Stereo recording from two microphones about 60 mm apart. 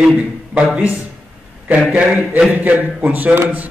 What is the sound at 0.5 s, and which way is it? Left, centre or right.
Speech, centre.